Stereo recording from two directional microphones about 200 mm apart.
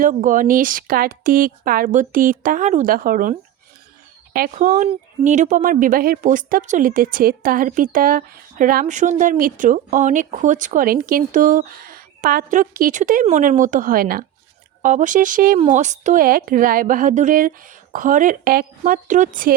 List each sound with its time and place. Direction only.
0.0 s a woman's voice: 40° right (ahead or behind)